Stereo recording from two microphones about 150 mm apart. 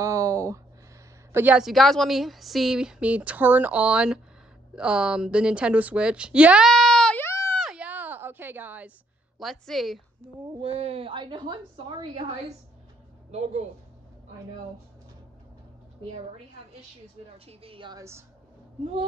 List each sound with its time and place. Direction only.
0.0 s a sound: 20° right (ahead or behind)
1.3 s a woman's voice: 10° right (ahead or behind); by 7.5 s 15° left (ahead or behind)
7.5 s a sound: 5° right (ahead or behind)
9.4 s a woman's voice: centre (ahead or behind)
10.6 s a woman's voice: 40° right (ahead or behind)
13.3 s speech: 45° right (ahead or behind)
17.5 s a woman's voice: 40° right (ahead or behind)
17.9 s a woman's voice: 20° right (ahead or behind)